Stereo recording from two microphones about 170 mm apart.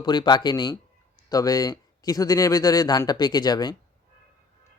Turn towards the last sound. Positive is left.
turn(degrees=25)  # may be behind; listen again after turning